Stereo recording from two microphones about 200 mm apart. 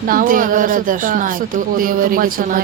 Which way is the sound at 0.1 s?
45° right (ahead or behind).